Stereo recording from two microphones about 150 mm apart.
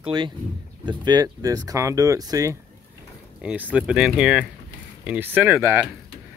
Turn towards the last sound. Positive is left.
turn(degrees=-15)  # may be behind; listen again after turning